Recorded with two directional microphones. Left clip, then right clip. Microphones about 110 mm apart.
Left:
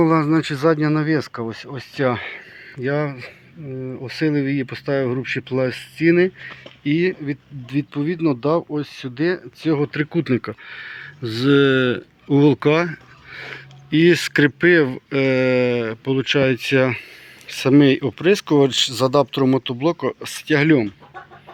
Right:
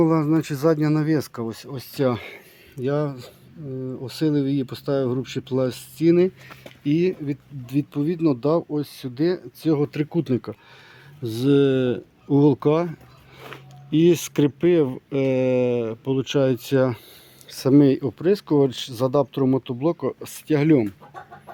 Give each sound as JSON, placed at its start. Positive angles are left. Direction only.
{"t": 0.0, "sound": "speech", "side_deg": -10}
{"t": 0.5, "sound": "speech", "side_deg": -20}
{"t": 4.0, "sound": "speech", "side_deg": 35}
{"t": 5.5, "sound": "speech", "side_deg": -5}
{"t": 6.0, "sound": "speech", "side_deg": -15}